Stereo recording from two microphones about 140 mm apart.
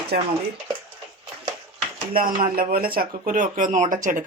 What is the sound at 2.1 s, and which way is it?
Speech, 90° right.